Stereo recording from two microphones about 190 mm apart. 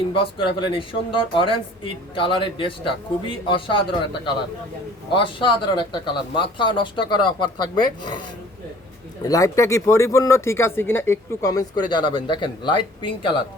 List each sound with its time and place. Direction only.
0.1 s speech: 25° left (ahead or behind)
5.1 s speech: 25° left (ahead or behind)
9.2 s speech: 15° left (ahead or behind)